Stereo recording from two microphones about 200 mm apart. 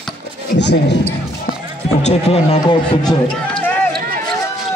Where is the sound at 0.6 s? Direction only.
60° left (ahead or behind).